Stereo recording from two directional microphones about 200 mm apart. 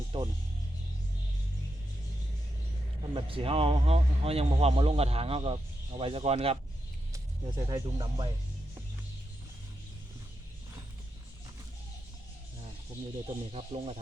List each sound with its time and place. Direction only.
0.1 s music: 25° right (ahead or behind)
3.2 s a man's voice: 25° right (ahead or behind)
7.1 s speech: 15° right (ahead or behind)
13.2 s speech: 30° right (ahead or behind)